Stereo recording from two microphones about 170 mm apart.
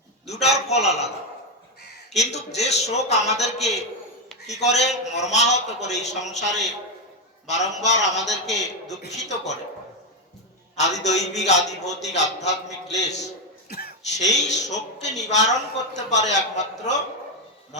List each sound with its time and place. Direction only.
0.3 s a man's voice: 40° left (ahead or behind)
2.1 s a man's voice: 40° left (ahead or behind)
10.8 s a man's voice: 40° left (ahead or behind)
13.7 s cough: 65° left (ahead or behind)
14.2 s a man's voice: 45° left (ahead or behind)